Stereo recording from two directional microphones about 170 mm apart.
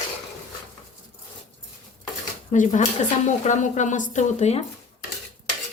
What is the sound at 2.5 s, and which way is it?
A woman's voice, 45° left (ahead or behind).